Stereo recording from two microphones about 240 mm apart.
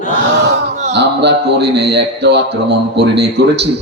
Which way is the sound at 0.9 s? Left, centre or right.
Right.